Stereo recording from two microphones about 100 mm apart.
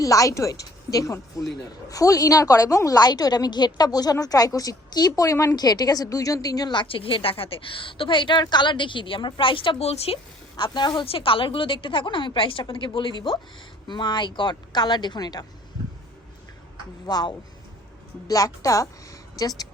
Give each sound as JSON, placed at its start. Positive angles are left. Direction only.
{"t": 0.0, "sound": "a woman's voice", "side_deg": 35}
{"t": 6.8, "sound": "a woman's voice", "side_deg": 65}
{"t": 10.6, "sound": "speech", "side_deg": 50}
{"t": 11.0, "sound": "a woman's voice", "side_deg": 65}
{"t": 17.1, "sound": "a woman's voice", "side_deg": 45}